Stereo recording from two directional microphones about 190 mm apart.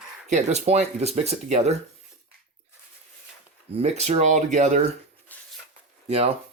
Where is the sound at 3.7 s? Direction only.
35° right (ahead or behind).